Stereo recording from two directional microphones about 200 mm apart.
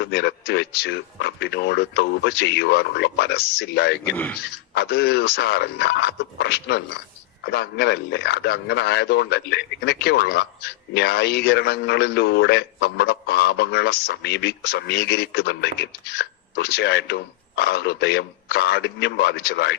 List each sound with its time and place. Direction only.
0.0 s a man's voice: 55° left (ahead or behind)
4.1 s a man's voice: 5° left (ahead or behind)
4.4 s a man's voice: 55° left (ahead or behind)